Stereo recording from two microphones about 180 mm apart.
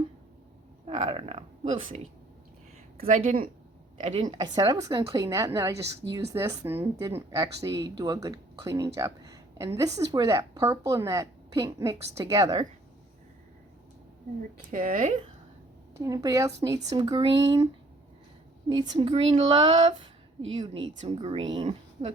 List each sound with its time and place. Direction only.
0.9 s speech: 30° right (ahead or behind)
3.2 s a woman's voice: 45° right (ahead or behind)
4.2 s a woman's voice: 25° right (ahead or behind)
14.7 s speech: 45° right (ahead or behind)
16.0 s a woman's voice: 20° right (ahead or behind)
18.7 s a woman's voice: 25° right (ahead or behind)